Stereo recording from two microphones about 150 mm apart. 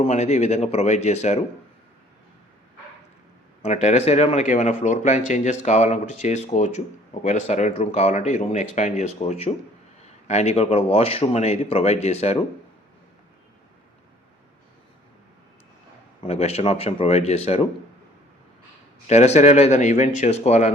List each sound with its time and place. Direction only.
0.0 s speech: 50° left (ahead or behind)
3.6 s speech: 50° left (ahead or behind)
16.2 s speech: 45° left (ahead or behind)
19.0 s speech: 50° left (ahead or behind)